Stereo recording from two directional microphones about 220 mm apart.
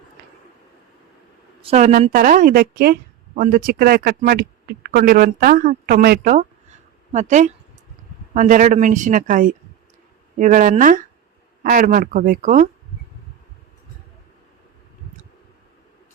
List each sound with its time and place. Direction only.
1.6 s a woman's voice: 30° right (ahead or behind)